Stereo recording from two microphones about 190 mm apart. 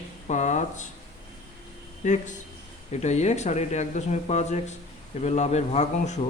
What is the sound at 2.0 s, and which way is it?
Speech, 40° left (ahead or behind).